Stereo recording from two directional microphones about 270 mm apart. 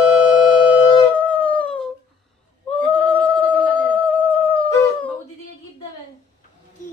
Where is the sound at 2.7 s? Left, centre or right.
Centre.